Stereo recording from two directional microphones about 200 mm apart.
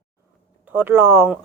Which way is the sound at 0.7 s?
10° right (ahead or behind).